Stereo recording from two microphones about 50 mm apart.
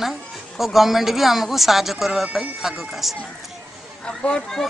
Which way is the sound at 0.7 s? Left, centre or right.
Centre.